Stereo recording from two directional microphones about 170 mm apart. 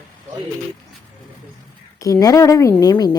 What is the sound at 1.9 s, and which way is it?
A woman's voice, 20° left (ahead or behind).